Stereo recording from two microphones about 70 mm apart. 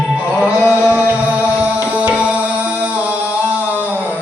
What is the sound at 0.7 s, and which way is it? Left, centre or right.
Music, centre.